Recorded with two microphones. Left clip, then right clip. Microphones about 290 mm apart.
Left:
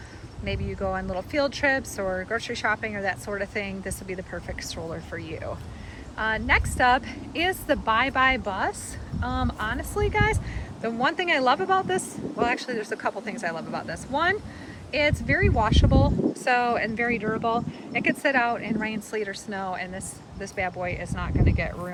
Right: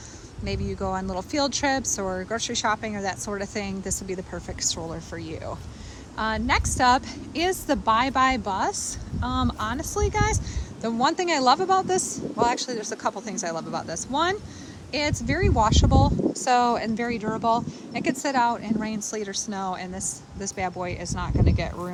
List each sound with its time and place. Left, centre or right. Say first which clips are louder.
0.4 s speech: even; centre